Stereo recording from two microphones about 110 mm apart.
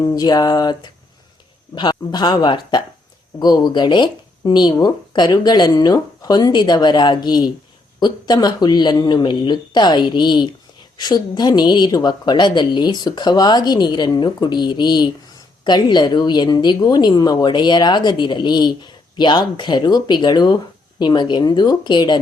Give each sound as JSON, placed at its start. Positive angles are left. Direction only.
{"t": 0.0, "sound": "speech", "side_deg": 35}